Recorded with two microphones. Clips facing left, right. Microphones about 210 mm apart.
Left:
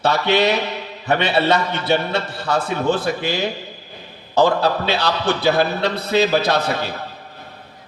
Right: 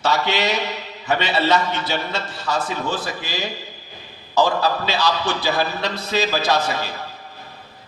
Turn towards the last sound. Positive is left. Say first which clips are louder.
# left 1 dB
turn(degrees=60)  # may be behind; listen again after turning